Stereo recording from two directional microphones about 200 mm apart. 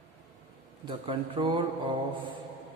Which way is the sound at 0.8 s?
25° right (ahead or behind).